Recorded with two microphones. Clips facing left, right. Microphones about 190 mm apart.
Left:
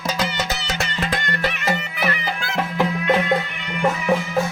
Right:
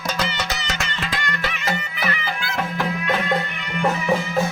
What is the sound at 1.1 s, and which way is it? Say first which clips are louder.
Music: left 4 dB; 50° left (ahead or behind).